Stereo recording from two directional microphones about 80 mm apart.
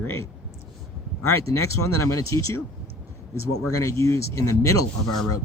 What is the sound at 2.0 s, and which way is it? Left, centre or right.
Speech, left.